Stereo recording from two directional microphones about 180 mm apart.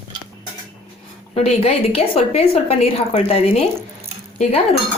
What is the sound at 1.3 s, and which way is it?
A woman's voice, 35° left (ahead or behind).